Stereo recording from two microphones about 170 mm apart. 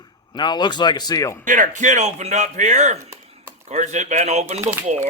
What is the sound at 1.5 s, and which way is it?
Speech, 50° right (ahead or behind).